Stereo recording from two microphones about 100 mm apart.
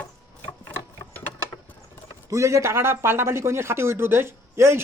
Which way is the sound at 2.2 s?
30° right (ahead or behind).